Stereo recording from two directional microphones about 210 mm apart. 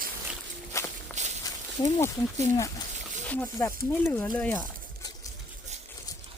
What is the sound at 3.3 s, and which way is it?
Speech, 10° left (ahead or behind).